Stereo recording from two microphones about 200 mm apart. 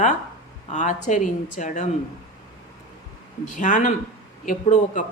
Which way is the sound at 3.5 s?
40° left (ahead or behind).